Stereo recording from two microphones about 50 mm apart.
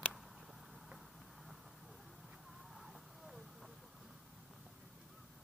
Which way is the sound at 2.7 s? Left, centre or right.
Centre.